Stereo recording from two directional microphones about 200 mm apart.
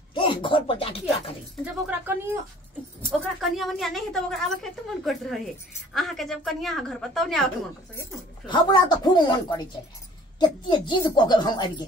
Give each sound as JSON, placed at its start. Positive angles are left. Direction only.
{"t": 0.1, "sound": "speech", "side_deg": 25}
{"t": 1.6, "sound": "a woman's voice", "side_deg": -10}
{"t": 8.5, "sound": "speech", "side_deg": 20}